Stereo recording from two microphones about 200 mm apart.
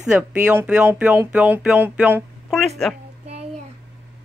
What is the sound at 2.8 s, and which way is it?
Speech, 5° left (ahead or behind).